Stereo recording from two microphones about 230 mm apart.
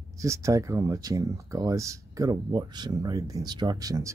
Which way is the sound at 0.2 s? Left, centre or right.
Centre.